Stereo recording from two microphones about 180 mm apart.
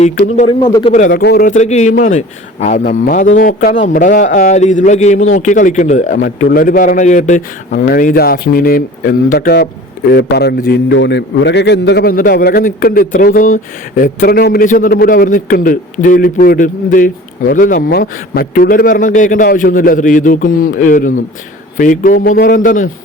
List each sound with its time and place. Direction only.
0.4 s speech: 25° left (ahead or behind)
0.9 s a man's voice: 45° left (ahead or behind)
1.2 s a man's voice: 65° left (ahead or behind)
1.5 s a man's voice: 40° left (ahead or behind); by 12.1 s 70° left (ahead or behind)
12.1 s a man's voice: 55° left (ahead or behind)